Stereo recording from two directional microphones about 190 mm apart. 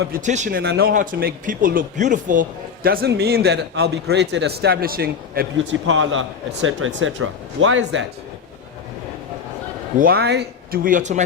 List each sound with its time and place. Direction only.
0.2 s speech: 40° right (ahead or behind)
0.6 s speech: 55° right (ahead or behind)
5.9 s speech: 90° right
10.0 s speech: 55° right (ahead or behind)